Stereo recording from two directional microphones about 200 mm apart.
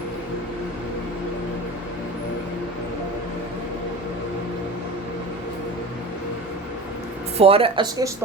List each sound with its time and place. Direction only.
7.3 s speech: 30° right (ahead or behind)